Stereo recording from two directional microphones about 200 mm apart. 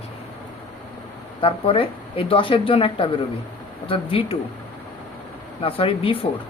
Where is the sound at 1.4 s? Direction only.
25° left (ahead or behind).